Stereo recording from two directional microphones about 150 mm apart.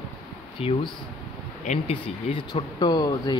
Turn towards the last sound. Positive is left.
turn(degrees=30)  # may be behind; listen again after turning